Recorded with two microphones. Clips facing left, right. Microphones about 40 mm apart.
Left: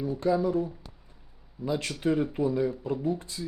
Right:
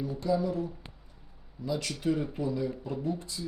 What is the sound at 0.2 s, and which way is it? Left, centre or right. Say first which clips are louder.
Speech: left 3 dB; left.